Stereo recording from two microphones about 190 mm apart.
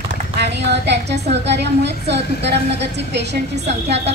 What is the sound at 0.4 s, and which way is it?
A woman's voice, 65° right (ahead or behind).